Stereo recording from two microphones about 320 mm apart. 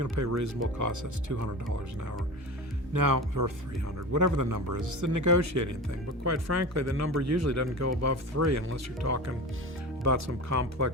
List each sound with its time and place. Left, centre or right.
0.0 s speech: right
2.9 s speech: right
4.1 s speech: right